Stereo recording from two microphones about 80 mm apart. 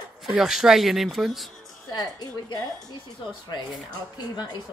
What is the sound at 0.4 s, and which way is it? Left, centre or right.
Speech, centre.